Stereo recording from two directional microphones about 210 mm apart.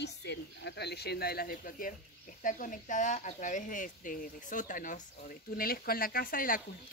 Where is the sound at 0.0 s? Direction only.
55° left (ahead or behind).